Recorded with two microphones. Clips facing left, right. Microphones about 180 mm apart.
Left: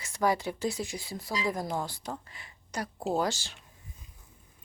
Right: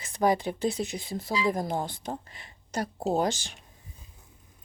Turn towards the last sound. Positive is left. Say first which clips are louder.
# right 3 dB
turn(degrees=-20)  # may be behind; listen again after turning